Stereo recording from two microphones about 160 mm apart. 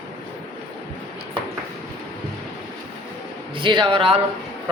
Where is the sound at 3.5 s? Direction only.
30° right (ahead or behind).